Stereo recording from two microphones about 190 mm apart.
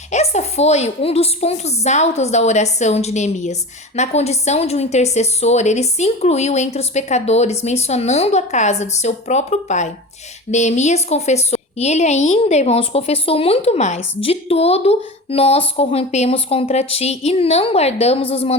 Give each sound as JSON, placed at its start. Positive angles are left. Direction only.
{"t": 0.1, "sound": "a woman's voice", "side_deg": 35}